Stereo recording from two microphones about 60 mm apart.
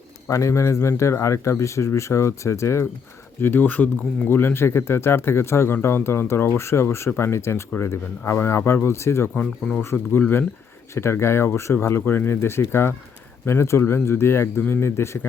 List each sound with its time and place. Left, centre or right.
0.3 s speech: left
3.4 s speech: left
8.2 s speech: left
9.3 s speech: centre
9.9 s speech: left